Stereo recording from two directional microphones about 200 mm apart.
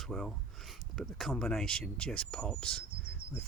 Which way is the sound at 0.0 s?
Centre (ahead or behind).